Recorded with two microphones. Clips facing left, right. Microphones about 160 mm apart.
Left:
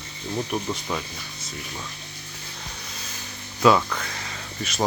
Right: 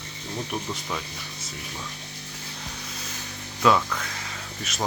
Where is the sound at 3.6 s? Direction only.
5° left (ahead or behind).